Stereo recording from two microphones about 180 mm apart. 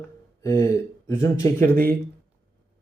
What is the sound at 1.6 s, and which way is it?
Speech, 55° right (ahead or behind).